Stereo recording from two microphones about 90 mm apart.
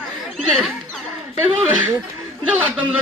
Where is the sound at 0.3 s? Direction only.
5° left (ahead or behind).